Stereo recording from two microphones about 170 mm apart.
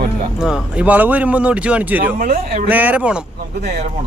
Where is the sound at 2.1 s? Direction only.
55° right (ahead or behind).